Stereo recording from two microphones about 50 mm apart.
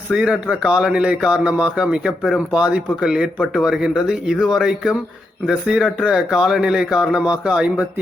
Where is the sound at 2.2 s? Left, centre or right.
Centre.